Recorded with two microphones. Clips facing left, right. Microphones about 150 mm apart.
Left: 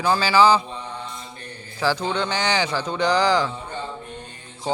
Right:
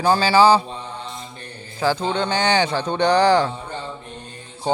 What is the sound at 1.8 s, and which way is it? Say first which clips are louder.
A man's voice: right 2 dB; 25° right (ahead or behind).